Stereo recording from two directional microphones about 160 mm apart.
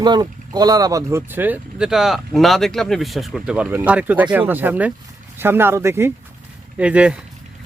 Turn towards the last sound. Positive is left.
turn(degrees=-5)  # may be behind; listen again after turning